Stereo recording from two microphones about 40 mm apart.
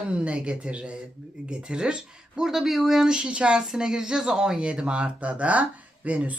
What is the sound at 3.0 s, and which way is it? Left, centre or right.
Speech, right.